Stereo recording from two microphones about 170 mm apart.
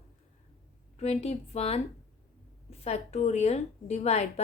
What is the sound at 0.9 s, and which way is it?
A woman's voice, 40° left (ahead or behind).